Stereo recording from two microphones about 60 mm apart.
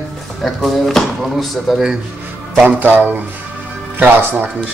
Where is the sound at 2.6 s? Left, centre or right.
Right.